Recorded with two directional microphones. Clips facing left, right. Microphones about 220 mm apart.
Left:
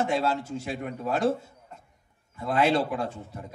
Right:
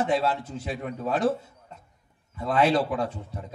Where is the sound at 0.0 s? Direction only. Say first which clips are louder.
Right 1 dB; 25° left (ahead or behind).